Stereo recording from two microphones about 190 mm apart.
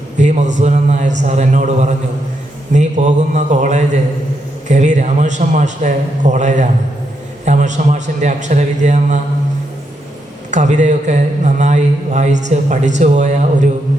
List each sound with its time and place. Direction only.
0.2 s a man's voice: 40° right (ahead or behind)
10.5 s a man's voice: 40° right (ahead or behind)